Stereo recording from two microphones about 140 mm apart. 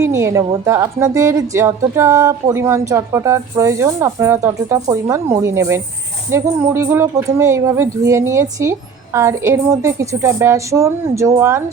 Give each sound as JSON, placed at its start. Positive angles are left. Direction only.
{"t": 0.0, "sound": "speech", "side_deg": -20}